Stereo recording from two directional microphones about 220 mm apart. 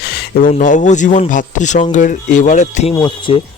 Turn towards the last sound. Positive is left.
turn(degrees=20)  # may be behind; listen again after turning